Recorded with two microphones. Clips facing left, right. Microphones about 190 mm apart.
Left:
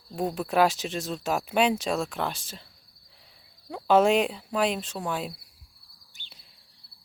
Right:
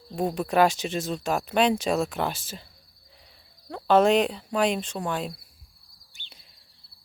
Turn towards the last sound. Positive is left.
turn(degrees=40)  # may be behind; listen again after turning